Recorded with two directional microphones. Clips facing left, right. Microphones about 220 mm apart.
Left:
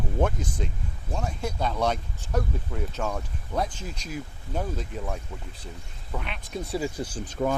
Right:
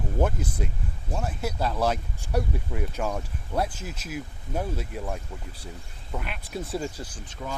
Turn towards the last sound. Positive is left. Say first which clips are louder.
# left 10 dB
turn(degrees=50)  # may be behind; listen again after turning